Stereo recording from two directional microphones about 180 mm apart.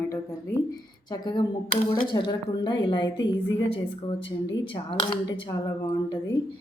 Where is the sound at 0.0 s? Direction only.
15° left (ahead or behind).